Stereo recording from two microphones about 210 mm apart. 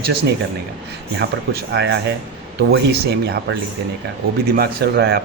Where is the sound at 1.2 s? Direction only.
50° right (ahead or behind).